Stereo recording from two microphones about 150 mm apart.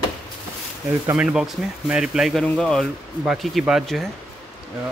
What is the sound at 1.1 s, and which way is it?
Speech, 5° right (ahead or behind).